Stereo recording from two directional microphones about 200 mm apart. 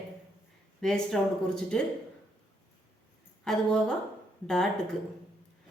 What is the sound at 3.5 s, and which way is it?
A woman's voice, 5° left (ahead or behind).